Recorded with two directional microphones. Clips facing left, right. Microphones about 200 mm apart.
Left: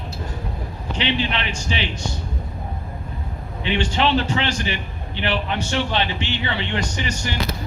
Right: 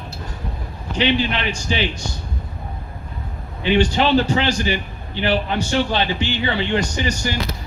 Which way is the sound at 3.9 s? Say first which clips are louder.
Right 3 dB; 35° right (ahead or behind).